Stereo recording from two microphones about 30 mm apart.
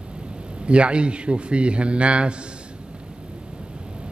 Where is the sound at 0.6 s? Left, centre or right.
Right.